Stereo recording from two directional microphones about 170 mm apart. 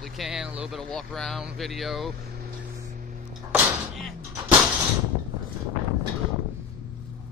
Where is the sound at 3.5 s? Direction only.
10° right (ahead or behind).